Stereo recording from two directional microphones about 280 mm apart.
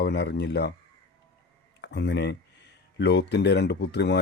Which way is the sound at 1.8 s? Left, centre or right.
Left.